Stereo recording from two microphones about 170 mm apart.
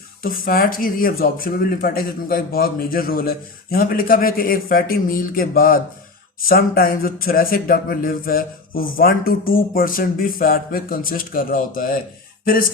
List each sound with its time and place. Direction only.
0.2 s speech: 55° left (ahead or behind)